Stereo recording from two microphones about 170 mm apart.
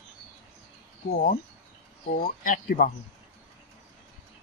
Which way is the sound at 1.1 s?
60° left (ahead or behind).